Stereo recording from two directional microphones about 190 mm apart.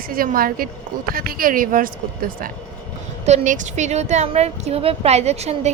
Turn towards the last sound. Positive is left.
turn(degrees=-35)  # may be behind; listen again after turning